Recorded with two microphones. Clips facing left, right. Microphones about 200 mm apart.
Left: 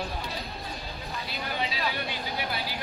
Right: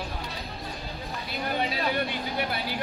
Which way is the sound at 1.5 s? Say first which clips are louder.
Right 4 dB; 55° right (ahead or behind).